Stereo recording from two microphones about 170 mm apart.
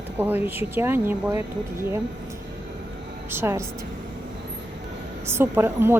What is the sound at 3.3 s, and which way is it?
Speech, 15° right (ahead or behind).